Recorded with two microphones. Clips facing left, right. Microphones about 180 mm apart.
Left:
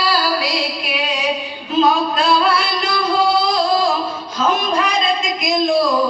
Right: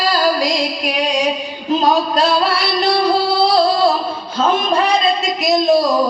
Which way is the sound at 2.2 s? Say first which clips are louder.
Right 1 dB; 40° right (ahead or behind).